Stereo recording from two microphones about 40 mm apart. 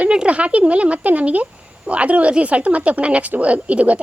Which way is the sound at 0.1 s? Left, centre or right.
Right.